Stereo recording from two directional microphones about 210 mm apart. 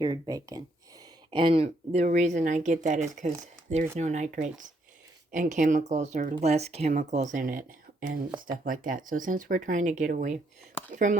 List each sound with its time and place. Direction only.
0.0 s speech: 20° right (ahead or behind); by 7.6 s 40° right (ahead or behind)
8.6 s speech: 40° right (ahead or behind)